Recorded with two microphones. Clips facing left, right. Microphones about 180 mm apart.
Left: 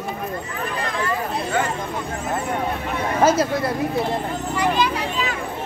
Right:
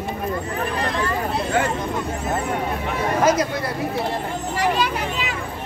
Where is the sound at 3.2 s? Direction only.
30° left (ahead or behind).